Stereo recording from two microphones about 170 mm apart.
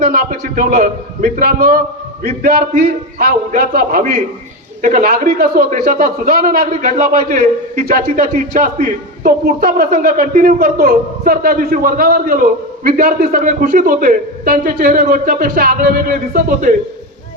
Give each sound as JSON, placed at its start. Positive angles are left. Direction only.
{"t": 0.0, "sound": "a man's voice", "side_deg": -55}